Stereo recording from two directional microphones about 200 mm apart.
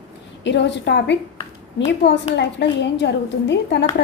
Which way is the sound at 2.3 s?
60° left (ahead or behind).